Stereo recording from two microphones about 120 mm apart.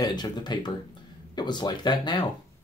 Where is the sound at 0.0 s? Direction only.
35° left (ahead or behind).